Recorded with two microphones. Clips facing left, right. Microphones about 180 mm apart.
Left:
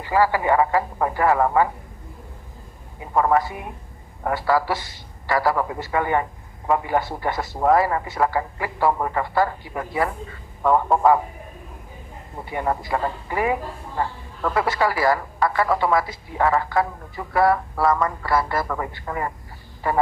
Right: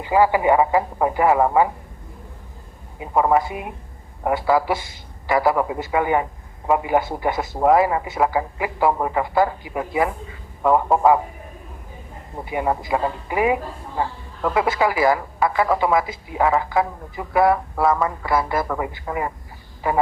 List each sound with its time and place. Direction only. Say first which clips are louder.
0.0 s a woman's voice: right 3 dB; 20° right (ahead or behind)
3.0 s a woman's voice: right 1 dB; 15° right (ahead or behind)
12.5 s a woman's voice: right 2 dB; 10° right (ahead or behind)
17.8 s speech: right 1 dB; 5° right (ahead or behind)
18.2 s a woman's voice: right 1 dB; 15° right (ahead or behind)